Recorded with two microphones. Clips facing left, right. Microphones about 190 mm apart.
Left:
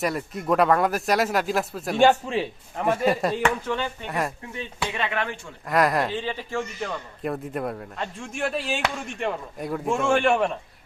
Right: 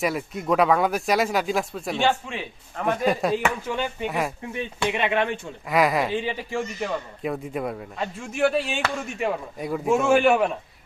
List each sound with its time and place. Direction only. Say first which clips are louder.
0.0 s speech: right 1 dB; centre (ahead or behind)
2.0 s a man's voice: left 6 dB; 40° left (ahead or behind)
2.7 s speech: left 1 dB; 5° left (ahead or behind)
3.7 s speech: right 1 dB; 10° right (ahead or behind)
5.6 s speech: even; centre (ahead or behind)
6.1 s speech: right 2 dB; 15° right (ahead or behind)
7.2 s speech: left 3 dB; centre (ahead or behind)